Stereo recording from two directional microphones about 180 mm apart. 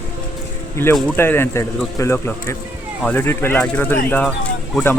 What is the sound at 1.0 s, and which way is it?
Speech, 10° left (ahead or behind).